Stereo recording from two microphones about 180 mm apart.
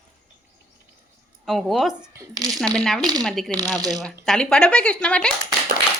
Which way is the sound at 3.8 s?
20° right (ahead or behind).